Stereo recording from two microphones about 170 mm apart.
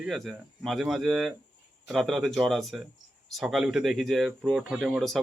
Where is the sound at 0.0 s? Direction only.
Centre (ahead or behind).